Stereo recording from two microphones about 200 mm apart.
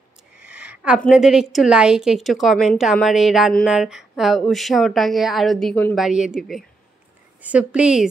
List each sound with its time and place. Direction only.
0.5 s a woman's voice: 5° right (ahead or behind)